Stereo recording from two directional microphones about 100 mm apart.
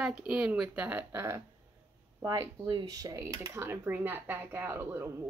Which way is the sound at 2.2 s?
30° right (ahead or behind).